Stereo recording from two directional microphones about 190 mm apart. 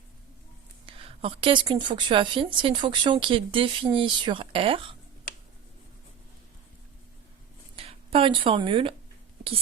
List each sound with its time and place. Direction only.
0.9 s a woman's voice: 30° right (ahead or behind)
7.8 s speech: 30° right (ahead or behind)